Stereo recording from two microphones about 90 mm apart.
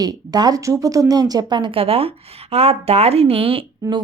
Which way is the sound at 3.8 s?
35° right (ahead or behind).